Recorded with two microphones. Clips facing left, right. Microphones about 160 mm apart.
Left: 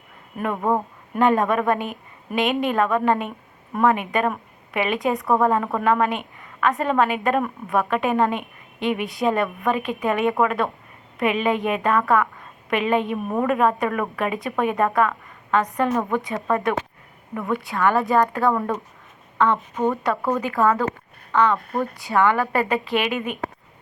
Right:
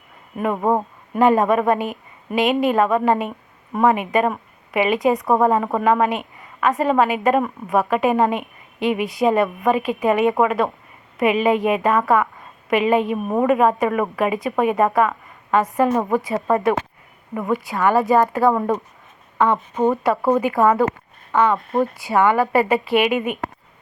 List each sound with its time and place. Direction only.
0.5 s speech: 20° right (ahead or behind)
1.1 s a woman's voice: 5° right (ahead or behind)
5.2 s speech: 20° right (ahead or behind)
5.8 s a woman's voice: 5° right (ahead or behind)
13.2 s a woman's voice: 15° right (ahead or behind)
13.5 s a woman's voice: 5° right (ahead or behind)
15.9 s speech: 20° right (ahead or behind)
17.3 s a woman's voice: centre (ahead or behind)
18.5 s a woman's voice: 20° right (ahead or behind)